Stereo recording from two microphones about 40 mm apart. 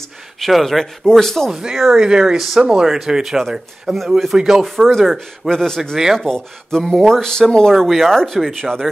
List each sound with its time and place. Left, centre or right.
0.4 s speech: centre
1.5 s speech: centre
2.3 s speech: centre
2.6 s speech: centre
5.5 s speech: centre
7.7 s speech: centre
8.5 s speech: centre